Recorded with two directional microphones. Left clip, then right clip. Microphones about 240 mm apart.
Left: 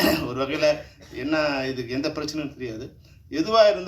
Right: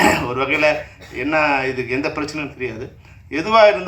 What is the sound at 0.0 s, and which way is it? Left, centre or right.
A man's voice, left.